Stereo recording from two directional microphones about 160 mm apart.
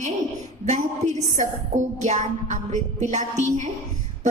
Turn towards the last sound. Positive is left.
turn(degrees=-45)  # may be behind; listen again after turning